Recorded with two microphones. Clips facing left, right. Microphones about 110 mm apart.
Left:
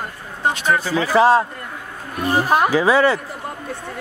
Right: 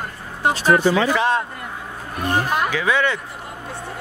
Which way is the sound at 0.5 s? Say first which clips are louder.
Right 6 dB; 35° right (ahead or behind).